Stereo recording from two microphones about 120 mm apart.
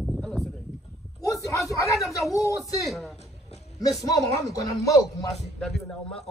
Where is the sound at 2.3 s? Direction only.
25° left (ahead or behind).